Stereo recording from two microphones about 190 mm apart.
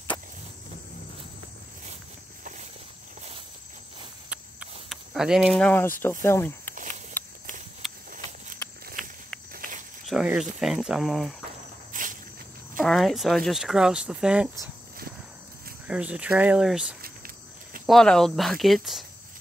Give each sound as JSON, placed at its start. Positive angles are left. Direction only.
{"t": 4.3, "sound": "cricket", "side_deg": -5}
{"t": 6.2, "sound": "speech", "side_deg": 10}
{"t": 7.8, "sound": "a sound", "side_deg": 0}
{"t": 8.8, "sound": "a sound", "side_deg": -45}
{"t": 10.0, "sound": "speech", "side_deg": -5}
{"t": 11.9, "sound": "cricket", "side_deg": -45}
{"t": 12.8, "sound": "speech", "side_deg": 0}
{"t": 15.9, "sound": "speech", "side_deg": -5}
{"t": 17.8, "sound": "speech", "side_deg": 5}